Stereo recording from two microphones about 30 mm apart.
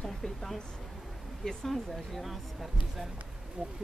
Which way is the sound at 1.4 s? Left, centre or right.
Left.